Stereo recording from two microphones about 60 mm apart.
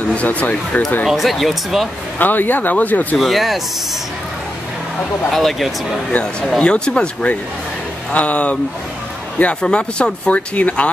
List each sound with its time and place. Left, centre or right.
0.1 s speech: left
1.0 s speech: centre
2.1 s speech: left
3.2 s speech: centre
5.3 s speech: centre
6.6 s speech: centre